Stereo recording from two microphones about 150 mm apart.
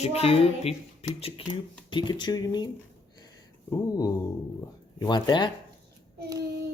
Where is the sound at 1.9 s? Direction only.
30° left (ahead or behind).